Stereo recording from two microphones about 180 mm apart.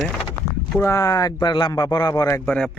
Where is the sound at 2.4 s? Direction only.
5° left (ahead or behind).